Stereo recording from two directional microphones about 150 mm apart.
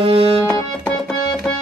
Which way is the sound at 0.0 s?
40° right (ahead or behind).